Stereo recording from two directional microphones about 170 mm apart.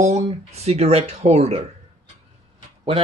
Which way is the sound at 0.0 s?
40° right (ahead or behind).